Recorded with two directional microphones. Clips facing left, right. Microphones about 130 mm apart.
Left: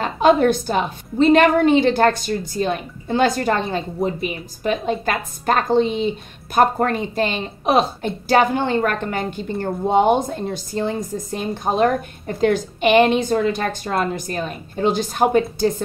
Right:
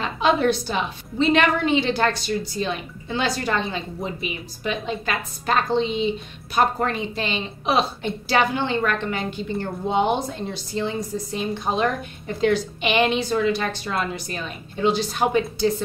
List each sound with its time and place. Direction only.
0.0 s a woman's voice: 50° left (ahead or behind)